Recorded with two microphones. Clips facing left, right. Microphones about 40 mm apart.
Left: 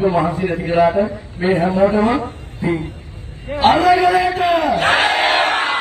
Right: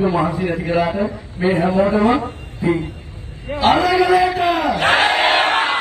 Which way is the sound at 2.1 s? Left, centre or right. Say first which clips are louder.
Right 1 dB; right.